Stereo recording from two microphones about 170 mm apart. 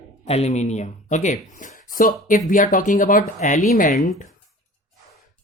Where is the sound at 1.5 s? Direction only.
50° left (ahead or behind).